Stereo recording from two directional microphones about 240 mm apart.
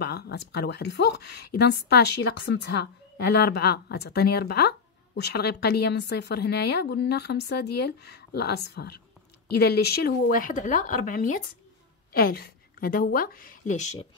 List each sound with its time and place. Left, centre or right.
0.0 s a woman's voice: left